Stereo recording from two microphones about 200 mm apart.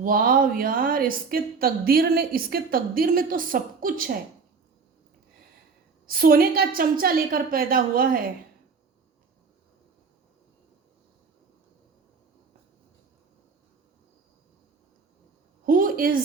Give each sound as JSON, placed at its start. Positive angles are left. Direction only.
{"t": 0.0, "sound": "a woman's voice", "side_deg": -45}
{"t": 6.1, "sound": "a woman's voice", "side_deg": -45}
{"t": 15.6, "sound": "a sound", "side_deg": -45}